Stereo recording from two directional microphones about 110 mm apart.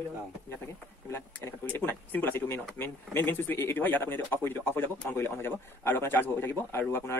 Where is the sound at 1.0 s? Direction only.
25° left (ahead or behind).